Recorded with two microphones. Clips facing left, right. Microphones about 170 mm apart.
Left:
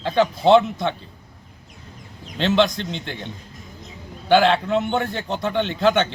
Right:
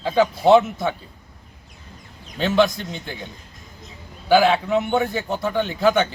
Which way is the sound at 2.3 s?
5° right (ahead or behind).